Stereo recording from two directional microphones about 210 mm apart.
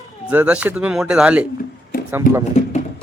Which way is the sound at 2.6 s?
30° left (ahead or behind).